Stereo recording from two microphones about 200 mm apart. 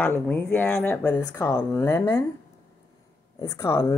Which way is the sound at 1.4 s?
15° left (ahead or behind).